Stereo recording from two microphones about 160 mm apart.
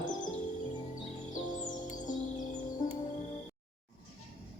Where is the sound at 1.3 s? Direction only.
55° left (ahead or behind).